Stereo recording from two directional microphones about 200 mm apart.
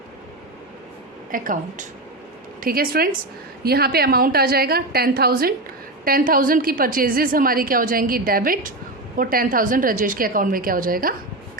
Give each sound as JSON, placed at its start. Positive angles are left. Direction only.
{"t": 1.3, "sound": "a woman's voice", "side_deg": -45}
{"t": 2.6, "sound": "a woman's voice", "side_deg": -45}